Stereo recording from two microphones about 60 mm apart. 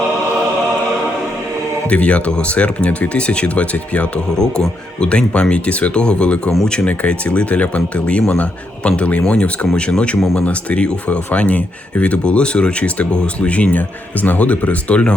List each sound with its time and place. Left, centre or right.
1.9 s speech: left